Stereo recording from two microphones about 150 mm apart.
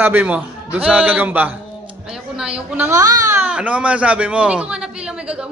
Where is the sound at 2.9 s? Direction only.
20° right (ahead or behind).